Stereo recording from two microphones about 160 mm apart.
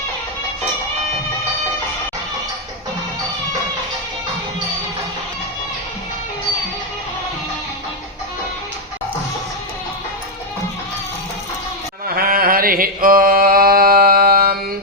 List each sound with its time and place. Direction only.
12.0 s mantra: 65° right (ahead or behind)